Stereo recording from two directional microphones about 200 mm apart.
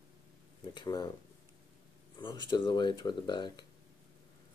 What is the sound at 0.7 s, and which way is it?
Speech, 20° left (ahead or behind).